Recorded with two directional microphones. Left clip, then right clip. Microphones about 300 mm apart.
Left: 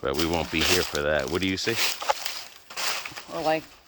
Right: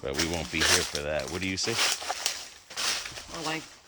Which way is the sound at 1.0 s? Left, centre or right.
Centre.